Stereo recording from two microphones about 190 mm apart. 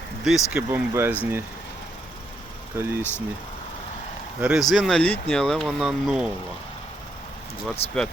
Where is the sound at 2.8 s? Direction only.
15° right (ahead or behind).